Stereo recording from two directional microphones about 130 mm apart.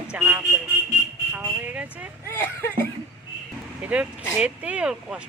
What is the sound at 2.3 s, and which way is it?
Speech, 20° left (ahead or behind).